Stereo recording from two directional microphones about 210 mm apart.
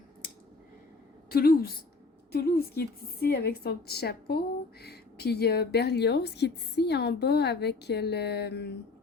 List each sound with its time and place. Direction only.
1.3 s a woman's voice: 45° left (ahead or behind)